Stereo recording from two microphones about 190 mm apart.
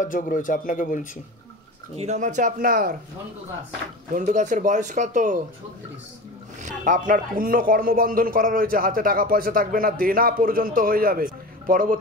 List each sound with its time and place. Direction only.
0.0 s speech: 45° left (ahead or behind)
2.0 s speech: 40° right (ahead or behind)
4.1 s speech: 40° right (ahead or behind)
6.6 s speech: 45° right (ahead or behind)